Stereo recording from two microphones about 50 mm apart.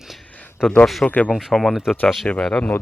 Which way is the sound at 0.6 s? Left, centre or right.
Centre.